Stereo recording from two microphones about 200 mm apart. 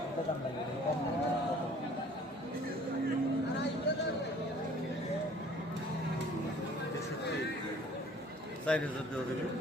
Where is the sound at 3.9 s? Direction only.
60° left (ahead or behind).